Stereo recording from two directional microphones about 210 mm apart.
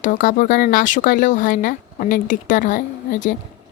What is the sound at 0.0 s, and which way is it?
A woman's voice, 40° left (ahead or behind).